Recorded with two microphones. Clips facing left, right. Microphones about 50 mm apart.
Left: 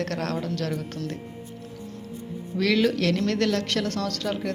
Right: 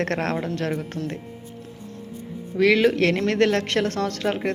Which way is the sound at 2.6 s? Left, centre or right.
Centre.